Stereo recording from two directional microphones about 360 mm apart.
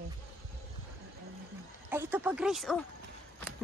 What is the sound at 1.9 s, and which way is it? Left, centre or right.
Speech, centre.